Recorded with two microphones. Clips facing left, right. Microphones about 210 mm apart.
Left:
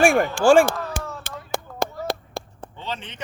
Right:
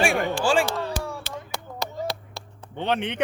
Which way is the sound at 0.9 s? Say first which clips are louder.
Right 1 dB; 50° left (ahead or behind).